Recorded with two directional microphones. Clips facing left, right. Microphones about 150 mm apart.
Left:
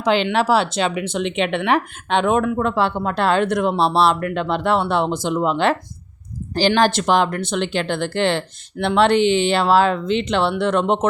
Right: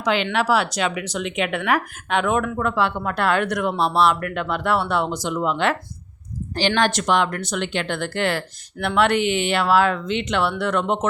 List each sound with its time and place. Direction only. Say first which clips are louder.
0.0 s speech: left 3 dB; 30° left (ahead or behind)